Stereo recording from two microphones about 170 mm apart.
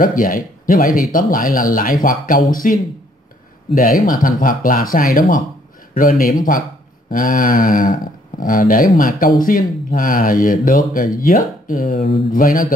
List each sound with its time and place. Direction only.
0.0 s speech: 55° left (ahead or behind)